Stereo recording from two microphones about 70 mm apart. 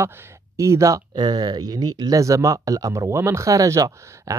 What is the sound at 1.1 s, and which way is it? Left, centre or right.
Speech, right.